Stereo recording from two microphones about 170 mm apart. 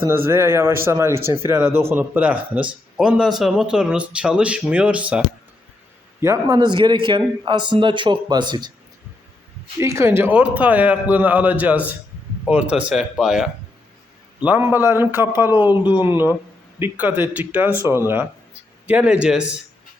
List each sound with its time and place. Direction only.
0.3 s speech: 15° right (ahead or behind)
6.2 s a man's voice: 20° right (ahead or behind)
9.7 s speech: 15° right (ahead or behind)